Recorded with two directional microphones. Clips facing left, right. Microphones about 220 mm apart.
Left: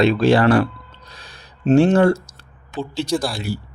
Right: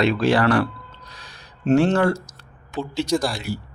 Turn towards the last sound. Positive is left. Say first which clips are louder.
# even
turn(degrees=5)  # may be behind; listen again after turning